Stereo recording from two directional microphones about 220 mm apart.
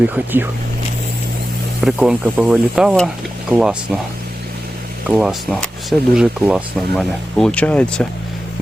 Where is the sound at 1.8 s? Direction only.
5° right (ahead or behind).